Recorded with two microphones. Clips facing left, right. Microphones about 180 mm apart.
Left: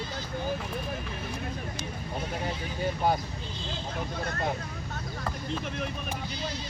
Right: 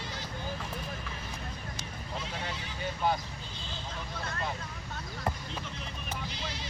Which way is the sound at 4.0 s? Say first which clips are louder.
Left 5 dB; 45° left (ahead or behind).